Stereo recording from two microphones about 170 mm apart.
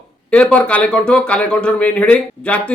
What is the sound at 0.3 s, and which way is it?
A man's voice, 5° left (ahead or behind).